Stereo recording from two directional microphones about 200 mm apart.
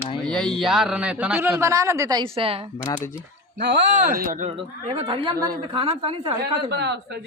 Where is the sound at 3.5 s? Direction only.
45° right (ahead or behind).